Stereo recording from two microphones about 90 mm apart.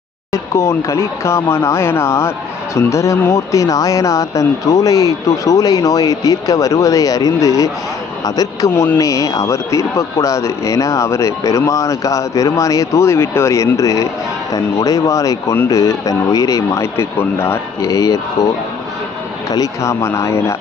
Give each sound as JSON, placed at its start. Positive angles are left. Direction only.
{"t": 0.3, "sound": "a man's voice", "side_deg": 30}
{"t": 8.7, "sound": "speech", "side_deg": 25}
{"t": 9.0, "sound": "speech", "side_deg": 40}
{"t": 19.5, "sound": "speech", "side_deg": 40}